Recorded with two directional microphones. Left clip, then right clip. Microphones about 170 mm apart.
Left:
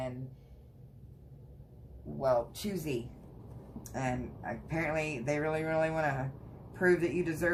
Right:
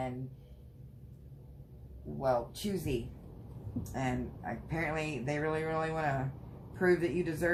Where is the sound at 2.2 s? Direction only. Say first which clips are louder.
Left 2 dB; 40° left (ahead or behind).